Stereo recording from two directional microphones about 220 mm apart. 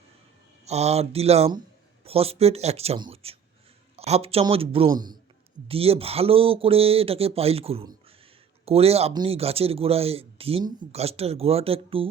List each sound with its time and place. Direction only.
0.6 s speech: 30° right (ahead or behind)